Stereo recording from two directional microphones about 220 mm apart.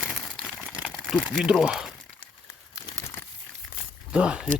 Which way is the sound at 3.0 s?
15° left (ahead or behind).